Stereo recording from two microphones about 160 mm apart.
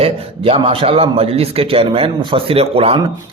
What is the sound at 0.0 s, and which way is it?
A man's voice, 35° right (ahead or behind).